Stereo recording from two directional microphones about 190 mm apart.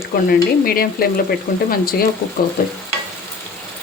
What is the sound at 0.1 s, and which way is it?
Speech, 50° left (ahead or behind).